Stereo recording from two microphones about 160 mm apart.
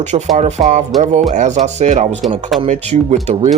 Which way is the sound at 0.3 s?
50° right (ahead or behind).